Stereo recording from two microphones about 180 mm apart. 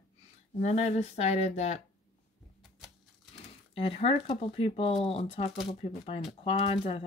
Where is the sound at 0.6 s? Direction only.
40° left (ahead or behind).